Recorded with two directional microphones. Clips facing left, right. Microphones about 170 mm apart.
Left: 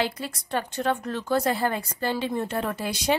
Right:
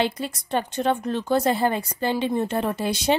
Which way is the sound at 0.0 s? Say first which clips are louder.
Right 3 dB; 20° right (ahead or behind).